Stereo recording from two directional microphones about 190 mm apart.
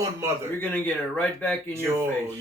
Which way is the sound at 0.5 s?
10° left (ahead or behind).